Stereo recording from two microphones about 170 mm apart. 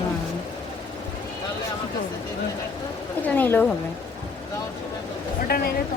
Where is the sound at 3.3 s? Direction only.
10° left (ahead or behind).